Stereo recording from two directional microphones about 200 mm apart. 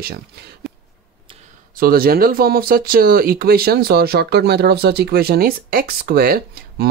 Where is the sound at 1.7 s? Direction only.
45° right (ahead or behind).